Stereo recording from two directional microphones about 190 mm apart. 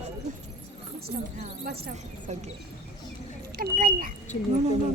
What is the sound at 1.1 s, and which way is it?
Speech, 45° right (ahead or behind).